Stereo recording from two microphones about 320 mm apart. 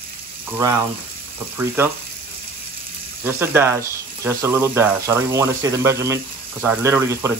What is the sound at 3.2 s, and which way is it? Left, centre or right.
Speech, centre.